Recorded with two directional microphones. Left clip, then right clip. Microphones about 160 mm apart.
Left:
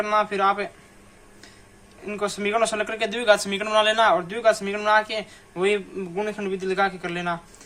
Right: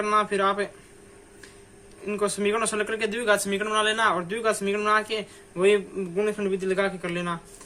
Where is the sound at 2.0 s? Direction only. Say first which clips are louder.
Right 1 dB; 30° left (ahead or behind).